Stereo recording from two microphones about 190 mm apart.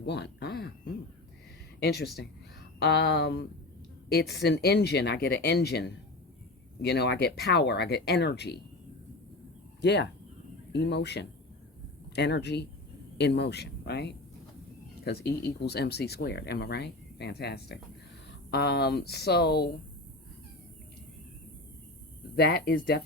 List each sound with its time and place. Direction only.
0.0 s speech: 60° left (ahead or behind)
9.8 s speech: 65° left (ahead or behind)
22.4 s speech: 55° left (ahead or behind)